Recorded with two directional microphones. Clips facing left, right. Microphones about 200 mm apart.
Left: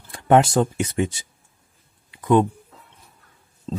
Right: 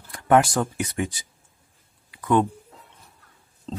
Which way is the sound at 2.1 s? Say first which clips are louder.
Left 3 dB; 20° left (ahead or behind).